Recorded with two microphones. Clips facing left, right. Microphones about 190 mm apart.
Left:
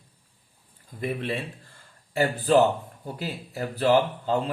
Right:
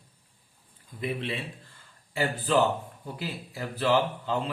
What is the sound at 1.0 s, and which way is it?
A man's voice, 45° left (ahead or behind).